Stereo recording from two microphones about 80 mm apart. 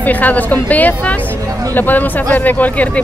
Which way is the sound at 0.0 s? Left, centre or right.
Left.